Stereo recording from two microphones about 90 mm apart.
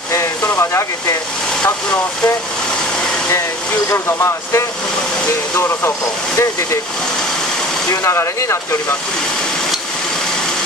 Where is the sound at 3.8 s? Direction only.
30° left (ahead or behind).